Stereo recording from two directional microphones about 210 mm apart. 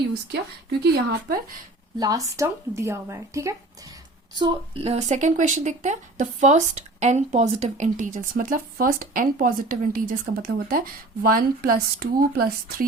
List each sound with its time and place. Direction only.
0.3 s speech: 50° right (ahead or behind)
2.0 s a woman's voice: 15° right (ahead or behind); by 12.9 s 45° right (ahead or behind)